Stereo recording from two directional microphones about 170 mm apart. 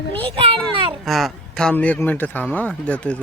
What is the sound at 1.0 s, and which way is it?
Speech, centre (ahead or behind).